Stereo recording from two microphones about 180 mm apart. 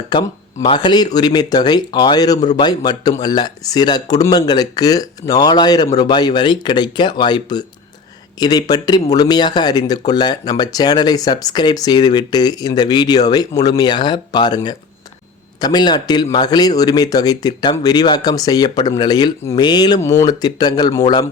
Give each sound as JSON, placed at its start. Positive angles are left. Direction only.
{"t": 0.1, "sound": "speech", "side_deg": 25}